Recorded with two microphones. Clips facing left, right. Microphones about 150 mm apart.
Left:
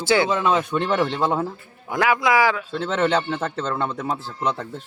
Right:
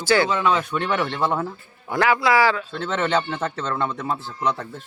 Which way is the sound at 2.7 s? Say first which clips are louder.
Left 2 dB; centre (ahead or behind).